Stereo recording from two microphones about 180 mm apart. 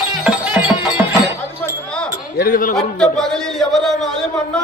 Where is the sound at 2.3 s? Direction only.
55° left (ahead or behind).